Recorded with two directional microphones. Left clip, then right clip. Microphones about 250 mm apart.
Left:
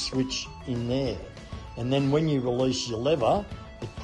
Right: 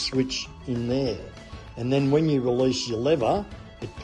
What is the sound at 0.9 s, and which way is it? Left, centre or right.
A man's voice, centre.